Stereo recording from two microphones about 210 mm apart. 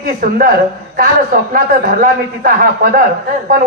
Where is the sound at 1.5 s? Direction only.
45° right (ahead or behind).